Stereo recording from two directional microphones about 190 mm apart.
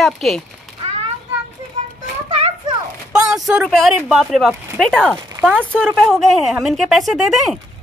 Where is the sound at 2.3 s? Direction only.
30° right (ahead or behind).